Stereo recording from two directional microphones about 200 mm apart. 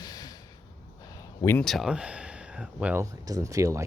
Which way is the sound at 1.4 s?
10° left (ahead or behind).